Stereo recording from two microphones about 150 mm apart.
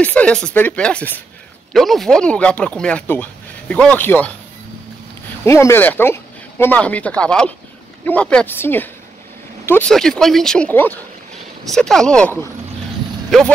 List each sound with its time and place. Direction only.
0.0 s speech: 10° left (ahead or behind)
5.4 s speech: 15° left (ahead or behind); by 13.5 s centre (ahead or behind)